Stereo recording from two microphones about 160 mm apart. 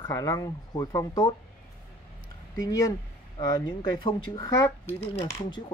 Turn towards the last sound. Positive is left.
turn(degrees=30)  # may be behind; listen again after turning